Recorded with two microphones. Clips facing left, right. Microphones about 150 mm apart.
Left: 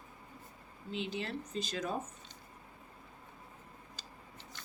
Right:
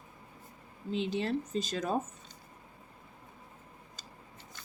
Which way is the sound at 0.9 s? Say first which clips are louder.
Right 7 dB; 35° right (ahead or behind).